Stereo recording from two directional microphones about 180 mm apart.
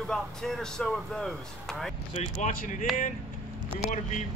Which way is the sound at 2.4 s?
45° left (ahead or behind).